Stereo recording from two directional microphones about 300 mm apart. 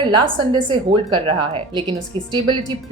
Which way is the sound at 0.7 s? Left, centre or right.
Centre.